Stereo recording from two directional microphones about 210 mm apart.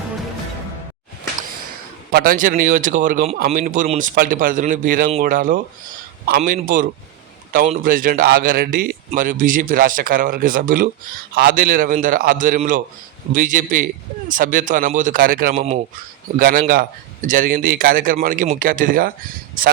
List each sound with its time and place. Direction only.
2.1 s a man's voice: 40° right (ahead or behind)